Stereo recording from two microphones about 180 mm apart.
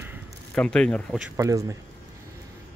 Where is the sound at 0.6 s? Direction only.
5° left (ahead or behind).